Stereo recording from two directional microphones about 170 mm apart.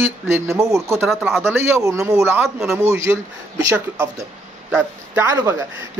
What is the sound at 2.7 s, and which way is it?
Speech, 15° right (ahead or behind).